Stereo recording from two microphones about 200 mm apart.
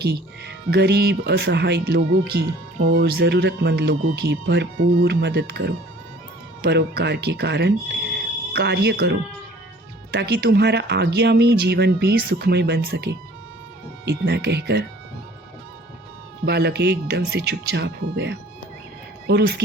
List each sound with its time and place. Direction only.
0.0 s speech: 55° right (ahead or behind)
16.5 s speech: 55° right (ahead or behind)